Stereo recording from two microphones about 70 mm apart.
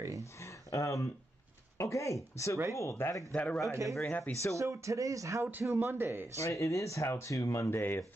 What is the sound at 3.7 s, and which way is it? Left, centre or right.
Speech, right.